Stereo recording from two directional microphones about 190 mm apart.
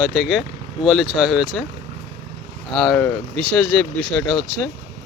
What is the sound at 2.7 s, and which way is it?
Speech, centre (ahead or behind).